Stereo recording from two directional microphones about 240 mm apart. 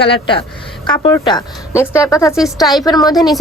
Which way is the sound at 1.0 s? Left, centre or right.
Centre.